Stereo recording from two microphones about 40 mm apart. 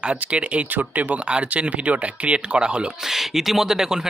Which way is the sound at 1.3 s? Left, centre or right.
Right.